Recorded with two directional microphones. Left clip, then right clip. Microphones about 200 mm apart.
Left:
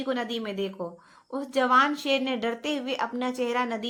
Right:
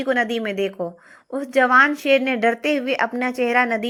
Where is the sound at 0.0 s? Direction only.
20° right (ahead or behind).